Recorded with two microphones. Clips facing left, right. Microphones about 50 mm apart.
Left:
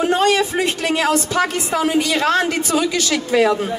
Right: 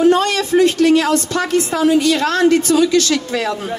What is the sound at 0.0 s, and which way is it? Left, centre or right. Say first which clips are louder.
Speech: right 2 dB; centre.